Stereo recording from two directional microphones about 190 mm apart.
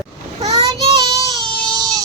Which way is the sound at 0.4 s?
25° right (ahead or behind).